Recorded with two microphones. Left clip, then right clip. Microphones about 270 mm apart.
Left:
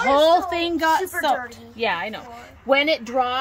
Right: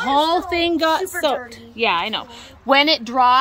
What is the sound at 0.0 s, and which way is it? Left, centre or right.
Speech, centre.